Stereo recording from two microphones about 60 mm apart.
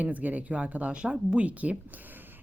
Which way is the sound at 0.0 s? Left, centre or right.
Right.